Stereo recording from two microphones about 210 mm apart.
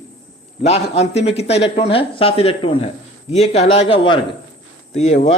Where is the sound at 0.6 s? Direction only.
30° left (ahead or behind).